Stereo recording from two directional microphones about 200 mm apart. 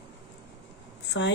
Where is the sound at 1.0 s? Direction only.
60° left (ahead or behind).